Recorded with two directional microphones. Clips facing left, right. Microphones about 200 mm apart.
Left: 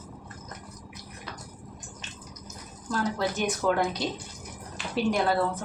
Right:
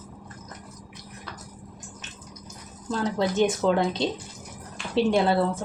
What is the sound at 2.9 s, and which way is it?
Speech, 25° right (ahead or behind).